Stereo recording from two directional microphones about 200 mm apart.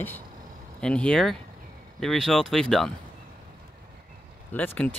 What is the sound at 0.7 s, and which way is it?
Speech, 5° left (ahead or behind).